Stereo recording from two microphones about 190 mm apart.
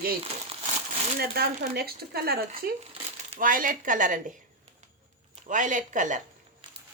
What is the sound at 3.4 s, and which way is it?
Speech, 45° right (ahead or behind).